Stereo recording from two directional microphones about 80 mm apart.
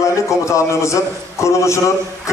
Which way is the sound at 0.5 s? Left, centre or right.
Left.